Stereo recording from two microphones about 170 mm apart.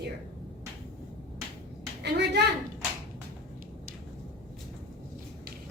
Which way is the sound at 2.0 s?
75° right (ahead or behind).